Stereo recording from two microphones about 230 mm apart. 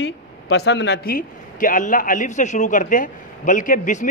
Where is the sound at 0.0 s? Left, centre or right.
Left.